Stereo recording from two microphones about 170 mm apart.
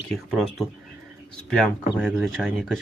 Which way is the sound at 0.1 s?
5° left (ahead or behind).